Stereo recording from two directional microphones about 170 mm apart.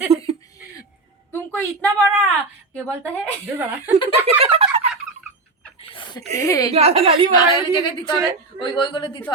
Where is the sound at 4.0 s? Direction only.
30° left (ahead or behind).